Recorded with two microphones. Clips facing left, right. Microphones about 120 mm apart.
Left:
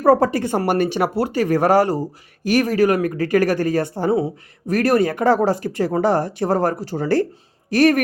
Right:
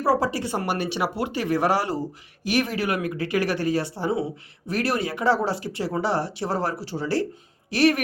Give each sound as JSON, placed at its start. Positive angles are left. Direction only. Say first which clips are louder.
{"t": 0.0, "sound": "speech", "louder": "left 7 dB", "side_deg": 50}